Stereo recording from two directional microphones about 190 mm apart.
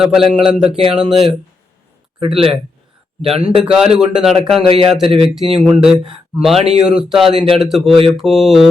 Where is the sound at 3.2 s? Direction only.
30° right (ahead or behind).